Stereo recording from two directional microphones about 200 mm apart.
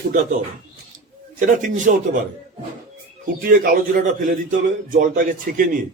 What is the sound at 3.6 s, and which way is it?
A man's voice, 40° right (ahead or behind).